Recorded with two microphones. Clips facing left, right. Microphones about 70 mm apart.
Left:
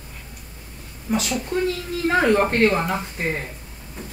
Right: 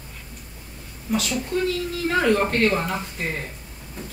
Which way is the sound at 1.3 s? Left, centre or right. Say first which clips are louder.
Even; left.